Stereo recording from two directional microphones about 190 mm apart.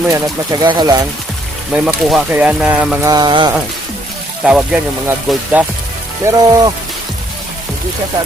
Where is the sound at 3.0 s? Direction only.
20° right (ahead or behind).